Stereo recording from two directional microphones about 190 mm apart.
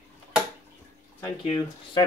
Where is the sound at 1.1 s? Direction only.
20° left (ahead or behind).